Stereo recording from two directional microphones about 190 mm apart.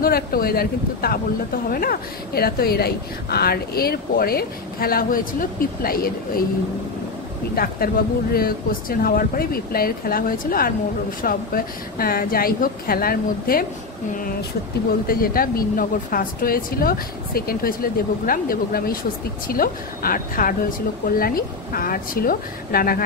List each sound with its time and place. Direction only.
0.0 s speech: 50° left (ahead or behind)
7.5 s speech: 50° left (ahead or behind)
14.9 s speech: 50° left (ahead or behind)